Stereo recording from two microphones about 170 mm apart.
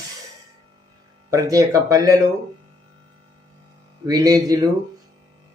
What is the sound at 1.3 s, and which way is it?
Speech, 20° right (ahead or behind).